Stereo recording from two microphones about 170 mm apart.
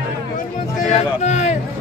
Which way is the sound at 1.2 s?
45° left (ahead or behind).